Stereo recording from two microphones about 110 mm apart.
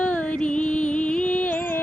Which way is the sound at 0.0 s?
10° left (ahead or behind).